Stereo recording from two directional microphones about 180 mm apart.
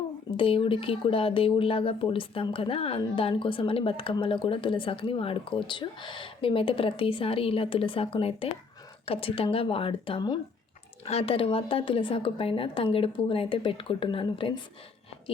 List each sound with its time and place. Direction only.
0.3 s speech: 30° left (ahead or behind)